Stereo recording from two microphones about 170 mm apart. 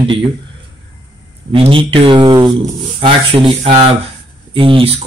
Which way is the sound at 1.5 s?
30° right (ahead or behind).